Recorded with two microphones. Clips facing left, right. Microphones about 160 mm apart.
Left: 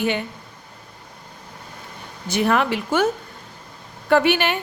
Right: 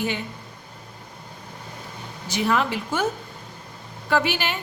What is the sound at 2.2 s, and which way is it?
Speech, 55° left (ahead or behind).